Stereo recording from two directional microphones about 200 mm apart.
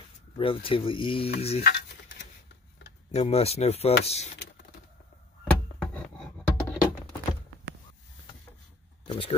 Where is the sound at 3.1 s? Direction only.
30° left (ahead or behind).